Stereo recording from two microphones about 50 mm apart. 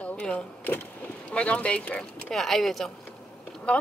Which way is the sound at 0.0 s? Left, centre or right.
Left.